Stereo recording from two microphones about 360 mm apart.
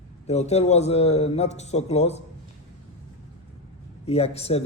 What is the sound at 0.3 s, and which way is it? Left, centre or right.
A man's voice, centre.